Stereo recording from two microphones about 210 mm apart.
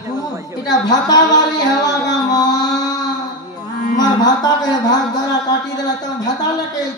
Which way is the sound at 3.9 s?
20° left (ahead or behind).